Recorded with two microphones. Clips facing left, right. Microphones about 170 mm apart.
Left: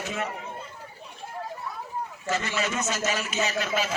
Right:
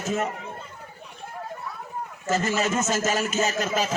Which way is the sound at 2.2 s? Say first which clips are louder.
Right 5 dB; 45° right (ahead or behind).